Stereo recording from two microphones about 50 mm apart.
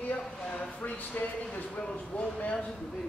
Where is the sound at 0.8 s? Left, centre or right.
Left.